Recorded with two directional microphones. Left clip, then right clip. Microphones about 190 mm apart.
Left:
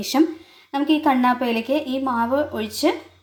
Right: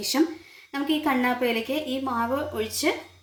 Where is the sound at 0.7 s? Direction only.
35° left (ahead or behind).